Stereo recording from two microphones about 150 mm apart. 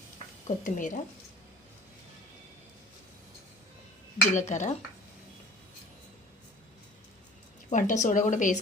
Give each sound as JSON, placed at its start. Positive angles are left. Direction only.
{"t": 0.4, "sound": "a woman's voice", "side_deg": 60}
{"t": 4.4, "sound": "speech", "side_deg": 55}
{"t": 7.7, "sound": "a woman's voice", "side_deg": 55}